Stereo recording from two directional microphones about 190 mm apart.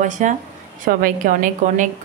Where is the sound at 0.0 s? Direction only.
40° right (ahead or behind).